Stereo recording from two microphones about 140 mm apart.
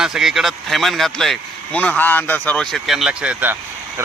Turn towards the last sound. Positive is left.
turn(degrees=-10)  # may be behind; listen again after turning